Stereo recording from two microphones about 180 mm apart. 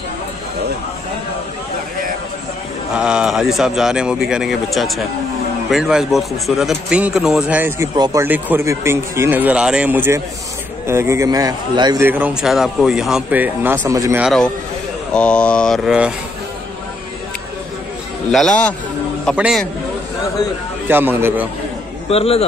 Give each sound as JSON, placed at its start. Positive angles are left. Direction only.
{"t": 2.9, "sound": "a man's voice", "side_deg": -5}
{"t": 12.0, "sound": "speech", "side_deg": -10}
{"t": 14.2, "sound": "speech", "side_deg": 0}
{"t": 18.3, "sound": "speech", "side_deg": 5}
{"t": 19.3, "sound": "speech", "side_deg": -5}
{"t": 20.9, "sound": "speech", "side_deg": -10}
{"t": 22.1, "sound": "a man's voice", "side_deg": 35}